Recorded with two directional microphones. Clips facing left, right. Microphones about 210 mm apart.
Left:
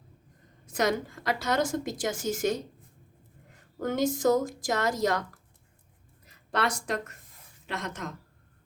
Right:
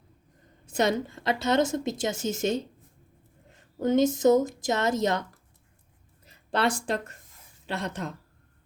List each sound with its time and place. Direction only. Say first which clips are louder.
0.7 s a woman's voice: right 2 dB; 25° right (ahead or behind)
3.8 s a woman's voice: right 5 dB; 20° right (ahead or behind)
6.2 s a woman's voice: right 3 dB; 30° right (ahead or behind)